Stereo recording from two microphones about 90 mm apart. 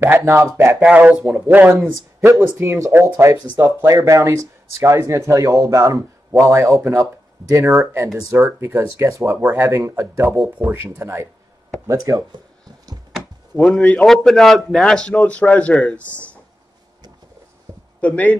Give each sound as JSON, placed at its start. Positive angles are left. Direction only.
{"t": 0.0, "sound": "speech", "side_deg": -30}
{"t": 0.7, "sound": "speech", "side_deg": -15}
{"t": 2.4, "sound": "speech", "side_deg": -30}
{"t": 11.9, "sound": "speech", "side_deg": -40}
{"t": 13.1, "sound": "speech", "side_deg": 5}
{"t": 17.7, "sound": "a sound", "side_deg": -45}
{"t": 18.0, "sound": "speech", "side_deg": 15}